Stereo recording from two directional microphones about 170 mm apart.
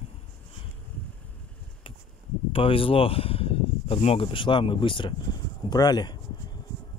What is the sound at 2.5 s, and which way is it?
Speech, 30° left (ahead or behind).